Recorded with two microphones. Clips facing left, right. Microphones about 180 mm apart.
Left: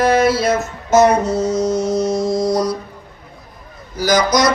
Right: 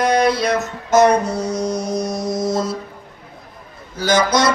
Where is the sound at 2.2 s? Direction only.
20° right (ahead or behind).